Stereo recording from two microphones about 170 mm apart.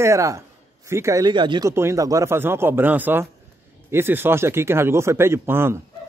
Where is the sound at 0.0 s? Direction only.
20° right (ahead or behind).